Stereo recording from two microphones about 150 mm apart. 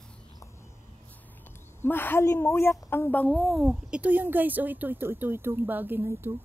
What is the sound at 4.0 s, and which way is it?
Speech, 10° right (ahead or behind).